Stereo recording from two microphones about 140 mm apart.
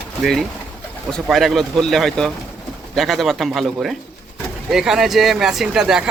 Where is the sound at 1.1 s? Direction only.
Centre (ahead or behind).